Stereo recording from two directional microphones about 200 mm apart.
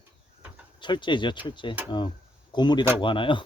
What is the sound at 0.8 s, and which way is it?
Speech, 25° left (ahead or behind).